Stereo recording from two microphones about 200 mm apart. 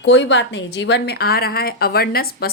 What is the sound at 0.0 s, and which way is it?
A woman's voice, 65° left (ahead or behind).